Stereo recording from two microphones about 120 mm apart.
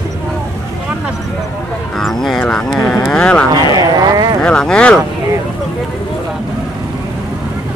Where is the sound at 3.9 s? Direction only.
35° right (ahead or behind).